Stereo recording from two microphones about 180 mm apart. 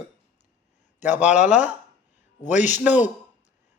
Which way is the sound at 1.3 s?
40° left (ahead or behind).